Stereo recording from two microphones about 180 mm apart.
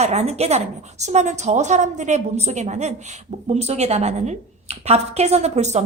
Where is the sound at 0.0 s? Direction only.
35° right (ahead or behind).